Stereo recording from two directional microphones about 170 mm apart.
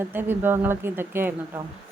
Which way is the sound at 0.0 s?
10° right (ahead or behind).